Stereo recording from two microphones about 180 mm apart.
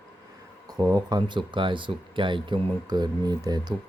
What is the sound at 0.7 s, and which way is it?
Mantra, 20° right (ahead or behind).